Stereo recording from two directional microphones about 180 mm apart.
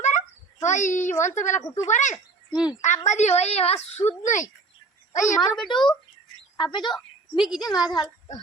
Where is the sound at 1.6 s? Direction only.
15° left (ahead or behind).